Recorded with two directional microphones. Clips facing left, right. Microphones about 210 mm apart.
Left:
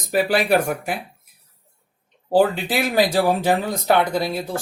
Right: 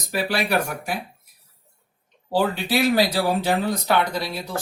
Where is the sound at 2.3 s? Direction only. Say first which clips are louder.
Left 4 dB; 50° left (ahead or behind).